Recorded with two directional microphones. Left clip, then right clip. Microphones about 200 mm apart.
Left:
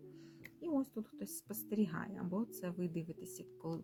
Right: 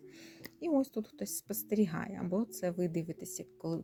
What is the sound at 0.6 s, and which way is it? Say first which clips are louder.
Speech: right 7 dB; 25° right (ahead or behind).